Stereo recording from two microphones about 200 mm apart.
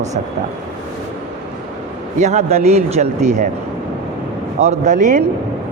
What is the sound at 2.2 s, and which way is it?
Speech, 35° right (ahead or behind).